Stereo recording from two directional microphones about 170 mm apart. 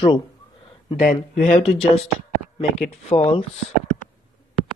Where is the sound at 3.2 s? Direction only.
35° left (ahead or behind).